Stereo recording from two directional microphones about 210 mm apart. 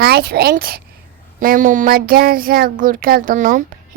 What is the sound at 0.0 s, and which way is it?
A woman's voice, 50° right (ahead or behind).